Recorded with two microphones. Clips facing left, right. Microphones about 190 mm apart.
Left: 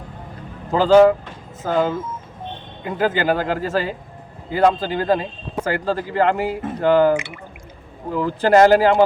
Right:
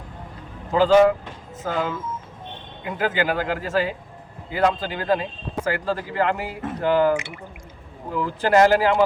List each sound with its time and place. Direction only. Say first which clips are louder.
0.7 s a man's voice: left 3 dB; 35° left (ahead or behind)